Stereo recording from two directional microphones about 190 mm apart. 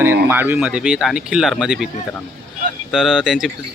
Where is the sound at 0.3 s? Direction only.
10° right (ahead or behind).